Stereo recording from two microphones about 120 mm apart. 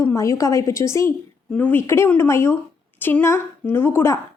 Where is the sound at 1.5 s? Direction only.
15° left (ahead or behind).